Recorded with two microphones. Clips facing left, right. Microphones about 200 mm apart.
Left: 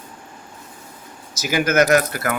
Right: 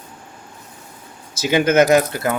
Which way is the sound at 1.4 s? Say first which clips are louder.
Right 3 dB; 25° right (ahead or behind).